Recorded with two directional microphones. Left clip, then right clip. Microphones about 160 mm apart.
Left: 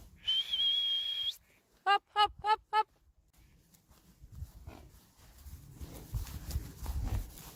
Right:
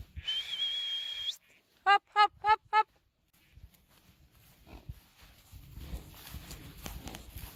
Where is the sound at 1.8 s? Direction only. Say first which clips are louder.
Right 4 dB; 25° right (ahead or behind).